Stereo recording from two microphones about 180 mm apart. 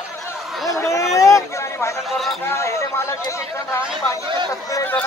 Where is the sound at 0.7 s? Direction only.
15° left (ahead or behind).